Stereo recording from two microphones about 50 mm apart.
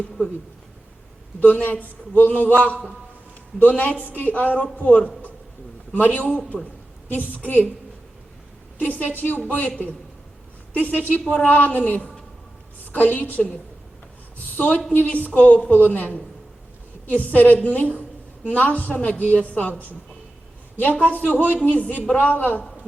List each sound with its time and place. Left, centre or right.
1.4 s a man's voice: left
6.1 s a man's voice: left
8.9 s a man's voice: left
9.6 s a woman's voice: left
13.1 s a man's voice: left
14.5 s a woman's voice: left
17.2 s a man's voice: left